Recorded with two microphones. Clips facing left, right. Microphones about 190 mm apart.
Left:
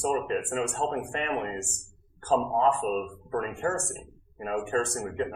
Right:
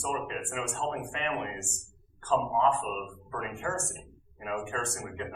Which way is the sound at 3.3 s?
40° left (ahead or behind).